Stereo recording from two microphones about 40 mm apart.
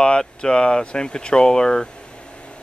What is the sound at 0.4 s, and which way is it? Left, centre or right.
Speech, left.